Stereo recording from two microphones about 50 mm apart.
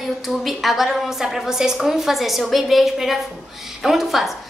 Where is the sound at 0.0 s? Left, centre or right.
Centre.